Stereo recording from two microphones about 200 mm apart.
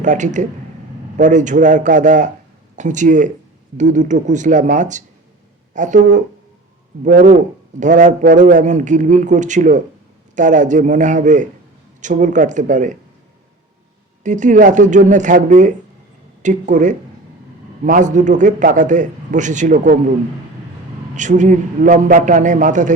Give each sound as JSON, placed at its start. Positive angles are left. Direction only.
{"t": 0.0, "sound": "a man's voice", "side_deg": -40}
{"t": 14.3, "sound": "a man's voice", "side_deg": -40}
{"t": 21.2, "sound": "a man's voice", "side_deg": -40}